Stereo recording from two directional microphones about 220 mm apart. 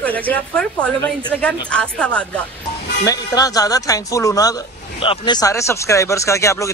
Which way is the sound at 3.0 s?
15° left (ahead or behind).